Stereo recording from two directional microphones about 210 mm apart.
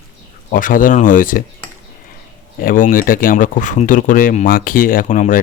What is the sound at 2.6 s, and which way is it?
Speech, 40° left (ahead or behind).